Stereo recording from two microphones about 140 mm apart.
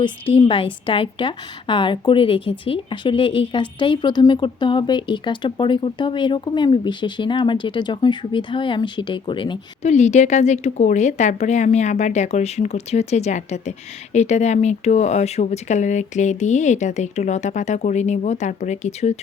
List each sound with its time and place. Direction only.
0.0 s a woman's voice: 35° left (ahead or behind)
9.8 s speech: 55° left (ahead or behind)